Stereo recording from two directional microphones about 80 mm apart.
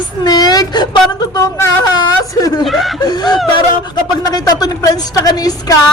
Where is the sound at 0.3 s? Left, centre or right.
Left.